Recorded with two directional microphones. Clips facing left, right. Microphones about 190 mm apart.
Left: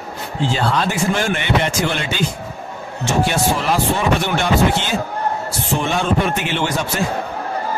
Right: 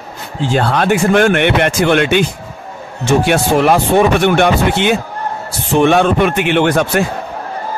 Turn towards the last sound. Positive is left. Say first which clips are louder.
# right 8 dB
turn(degrees=-60)  # may be behind; listen again after turning